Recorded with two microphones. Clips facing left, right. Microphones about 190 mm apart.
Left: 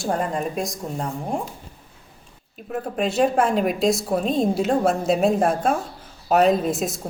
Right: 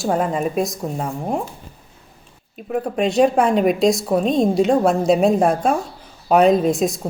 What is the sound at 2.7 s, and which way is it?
A woman's voice, centre (ahead or behind).